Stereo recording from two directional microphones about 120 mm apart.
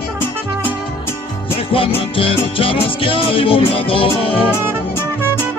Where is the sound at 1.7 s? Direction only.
50° left (ahead or behind).